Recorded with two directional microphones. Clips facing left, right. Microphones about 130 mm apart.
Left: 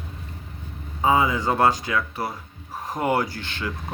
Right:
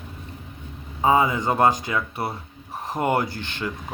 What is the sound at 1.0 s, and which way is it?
Speech, 30° right (ahead or behind).